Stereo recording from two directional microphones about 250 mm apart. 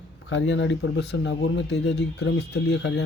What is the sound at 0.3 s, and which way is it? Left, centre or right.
Speech, left.